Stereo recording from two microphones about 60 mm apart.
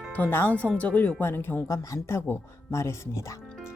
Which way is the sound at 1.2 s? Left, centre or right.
Left.